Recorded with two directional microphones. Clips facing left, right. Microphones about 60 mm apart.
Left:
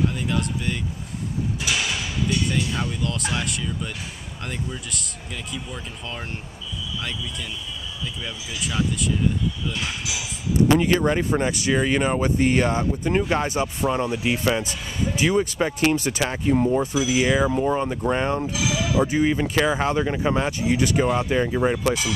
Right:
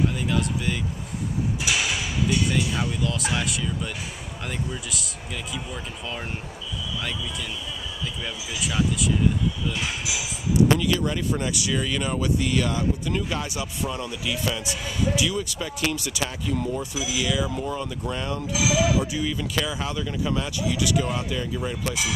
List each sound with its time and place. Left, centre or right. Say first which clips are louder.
0.3 s speech: even; centre
5.5 s speech: even; centre
8.5 s speech: even; centre
10.8 s speech: left 5 dB; left
18.5 s speech: right 2 dB; centre
18.9 s speech: left 6 dB; left